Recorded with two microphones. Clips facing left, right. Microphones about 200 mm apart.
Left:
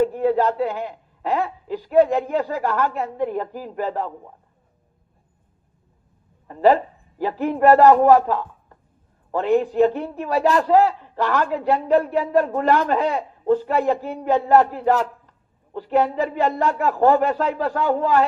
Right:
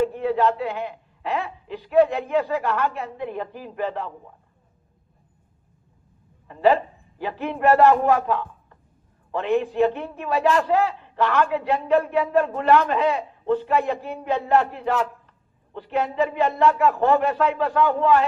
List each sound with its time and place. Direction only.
0.0 s a man's voice: 40° left (ahead or behind)
6.5 s a man's voice: 40° left (ahead or behind)